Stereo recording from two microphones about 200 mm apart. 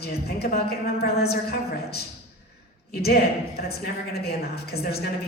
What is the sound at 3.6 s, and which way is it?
A woman's voice, 50° left (ahead or behind).